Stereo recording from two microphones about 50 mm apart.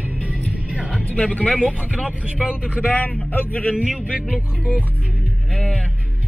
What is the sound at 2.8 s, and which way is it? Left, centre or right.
Speech, left.